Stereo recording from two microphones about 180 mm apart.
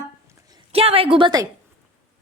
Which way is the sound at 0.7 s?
30° right (ahead or behind).